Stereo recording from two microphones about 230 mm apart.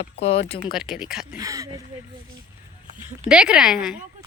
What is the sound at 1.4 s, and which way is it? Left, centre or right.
Speech, centre.